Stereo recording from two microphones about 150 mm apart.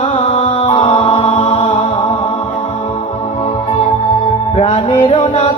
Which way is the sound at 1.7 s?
35° left (ahead or behind).